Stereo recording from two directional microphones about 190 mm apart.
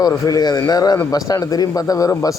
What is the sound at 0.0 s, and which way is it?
A man's voice, 20° left (ahead or behind).